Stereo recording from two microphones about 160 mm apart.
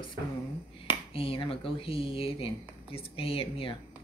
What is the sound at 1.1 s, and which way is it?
Speech, 35° left (ahead or behind).